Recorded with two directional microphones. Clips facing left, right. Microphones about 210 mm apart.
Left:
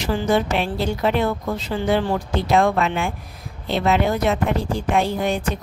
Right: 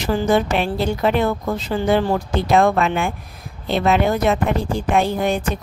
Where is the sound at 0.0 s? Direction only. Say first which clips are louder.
Right 2 dB; 50° right (ahead or behind).